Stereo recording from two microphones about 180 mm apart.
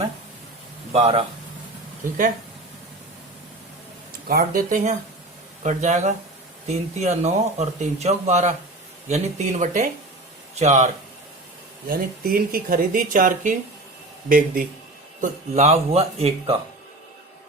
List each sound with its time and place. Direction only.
0.9 s a man's voice: 35° right (ahead or behind)
4.3 s a man's voice: 55° right (ahead or behind)
11.9 s a man's voice: 55° right (ahead or behind); by 16.6 s 35° right (ahead or behind)